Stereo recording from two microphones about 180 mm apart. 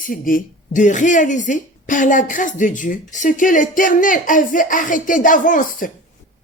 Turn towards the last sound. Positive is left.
turn(degrees=50)  # may be behind; listen again after turning